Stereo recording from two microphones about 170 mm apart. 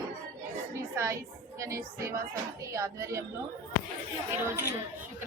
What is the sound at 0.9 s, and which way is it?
A woman's voice, 15° right (ahead or behind).